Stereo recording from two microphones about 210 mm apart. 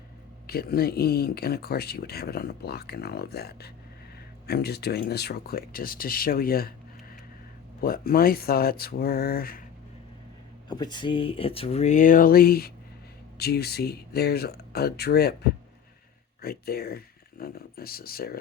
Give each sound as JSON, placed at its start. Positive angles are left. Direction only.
{"t": 0.4, "sound": "speech", "side_deg": 45}
{"t": 10.7, "sound": "speech", "side_deg": 20}